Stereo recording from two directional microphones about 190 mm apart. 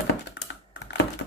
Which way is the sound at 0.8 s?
65° left (ahead or behind).